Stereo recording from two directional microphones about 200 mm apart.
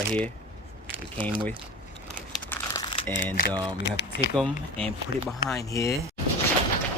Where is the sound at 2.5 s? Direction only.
20° left (ahead or behind).